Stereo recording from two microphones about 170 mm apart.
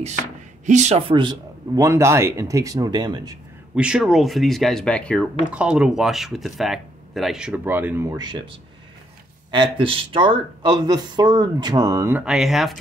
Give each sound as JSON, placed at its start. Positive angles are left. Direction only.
{"t": 0.7, "sound": "speech", "side_deg": -40}
{"t": 3.7, "sound": "speech", "side_deg": -5}
{"t": 5.5, "sound": "speech", "side_deg": -5}